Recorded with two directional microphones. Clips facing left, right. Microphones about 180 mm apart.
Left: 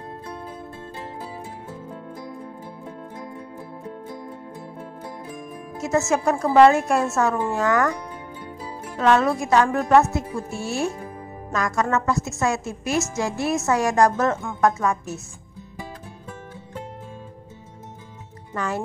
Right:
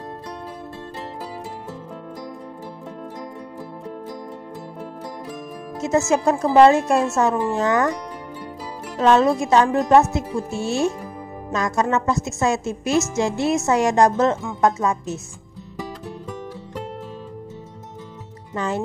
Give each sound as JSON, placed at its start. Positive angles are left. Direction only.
{"t": 5.8, "sound": "a woman's voice", "side_deg": -20}
{"t": 9.0, "sound": "a woman's voice", "side_deg": -20}
{"t": 18.5, "sound": "speech", "side_deg": -25}